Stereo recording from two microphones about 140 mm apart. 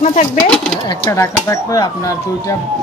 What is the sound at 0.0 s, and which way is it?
Speech, 65° left (ahead or behind).